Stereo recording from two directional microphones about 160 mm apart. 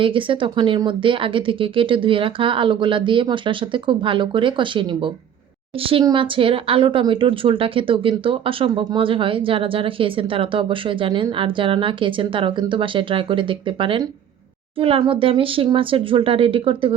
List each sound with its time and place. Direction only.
0.0 s speech: 30° right (ahead or behind)